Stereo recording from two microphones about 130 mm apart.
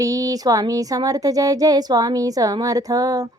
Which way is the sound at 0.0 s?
30° right (ahead or behind).